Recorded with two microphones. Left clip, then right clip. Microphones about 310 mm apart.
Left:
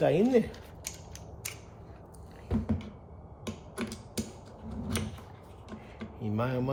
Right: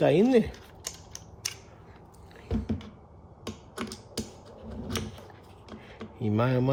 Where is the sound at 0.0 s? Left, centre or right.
Right.